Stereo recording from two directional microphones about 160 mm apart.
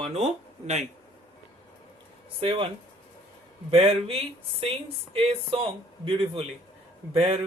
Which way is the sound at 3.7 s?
40° right (ahead or behind).